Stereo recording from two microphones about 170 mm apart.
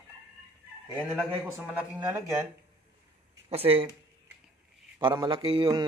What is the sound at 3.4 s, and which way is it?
Speech, 35° right (ahead or behind).